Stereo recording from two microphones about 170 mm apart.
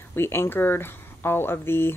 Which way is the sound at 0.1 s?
15° left (ahead or behind).